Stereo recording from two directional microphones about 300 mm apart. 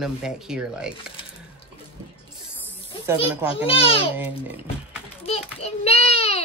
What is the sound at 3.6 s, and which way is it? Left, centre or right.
Speech, centre.